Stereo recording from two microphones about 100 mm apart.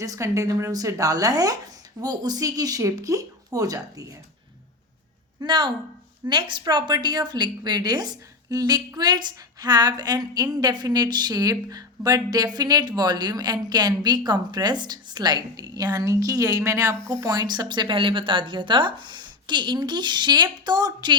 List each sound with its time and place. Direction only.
0.0 s a woman's voice: 35° right (ahead or behind)
5.4 s a woman's voice: 50° right (ahead or behind)